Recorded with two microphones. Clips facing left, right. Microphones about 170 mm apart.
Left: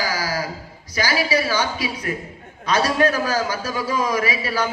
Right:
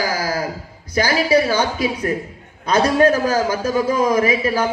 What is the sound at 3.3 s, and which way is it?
Speech, 50° right (ahead or behind).